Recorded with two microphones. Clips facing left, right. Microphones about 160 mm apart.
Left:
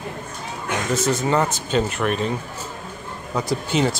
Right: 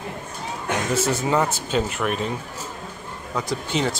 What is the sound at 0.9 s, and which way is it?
A man's voice, 10° right (ahead or behind).